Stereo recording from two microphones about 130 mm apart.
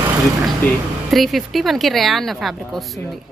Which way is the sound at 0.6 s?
15° left (ahead or behind).